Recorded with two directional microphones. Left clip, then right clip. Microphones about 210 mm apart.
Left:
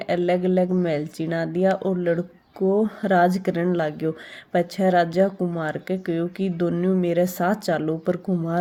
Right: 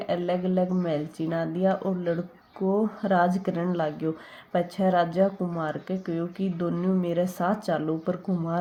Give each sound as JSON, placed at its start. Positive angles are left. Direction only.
{"t": 0.0, "sound": "speech", "side_deg": 35}